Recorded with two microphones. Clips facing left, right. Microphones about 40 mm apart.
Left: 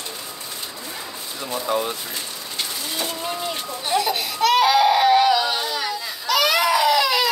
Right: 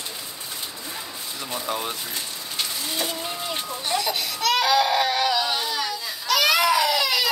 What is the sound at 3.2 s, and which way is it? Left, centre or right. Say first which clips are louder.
Speech: left 3 dB; centre.